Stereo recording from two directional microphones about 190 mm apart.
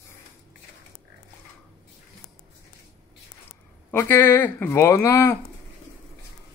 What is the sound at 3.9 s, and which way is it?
Speech, 10° left (ahead or behind).